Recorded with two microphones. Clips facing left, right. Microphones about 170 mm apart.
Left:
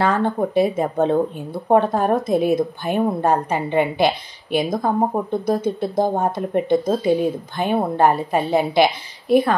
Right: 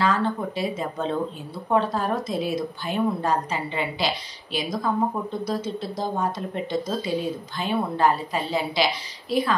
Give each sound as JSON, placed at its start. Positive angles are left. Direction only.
{"t": 0.0, "sound": "speech", "side_deg": 55}